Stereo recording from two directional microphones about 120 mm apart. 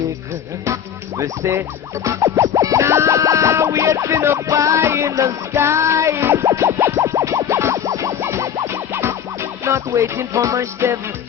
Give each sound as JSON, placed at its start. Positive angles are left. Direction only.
{"t": 1.2, "sound": "music", "side_deg": -25}